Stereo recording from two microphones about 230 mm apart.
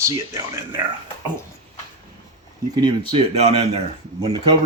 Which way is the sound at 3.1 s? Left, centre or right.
Right.